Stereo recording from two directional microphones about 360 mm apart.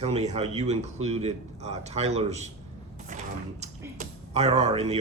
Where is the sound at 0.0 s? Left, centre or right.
Centre.